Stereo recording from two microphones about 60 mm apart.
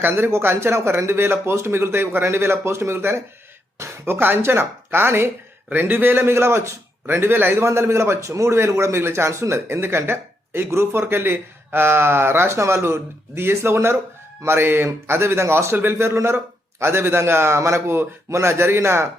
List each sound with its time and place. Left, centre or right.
0.0 s a man's voice: right
7.5 s speech: right